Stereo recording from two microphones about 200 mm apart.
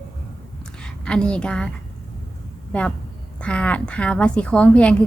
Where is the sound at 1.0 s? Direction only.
5° left (ahead or behind).